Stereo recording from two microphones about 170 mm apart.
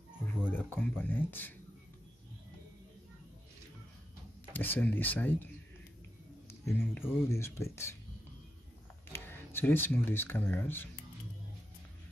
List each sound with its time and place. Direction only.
0.5 s speech: 10° left (ahead or behind)
4.5 s speech: 10° left (ahead or behind)
6.6 s speech: 10° left (ahead or behind)
9.1 s speech: 15° left (ahead or behind)